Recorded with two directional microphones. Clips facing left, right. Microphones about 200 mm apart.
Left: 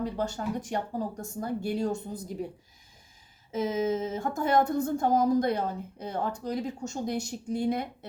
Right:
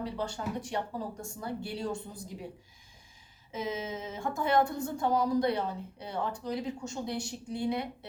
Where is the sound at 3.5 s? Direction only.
45° left (ahead or behind).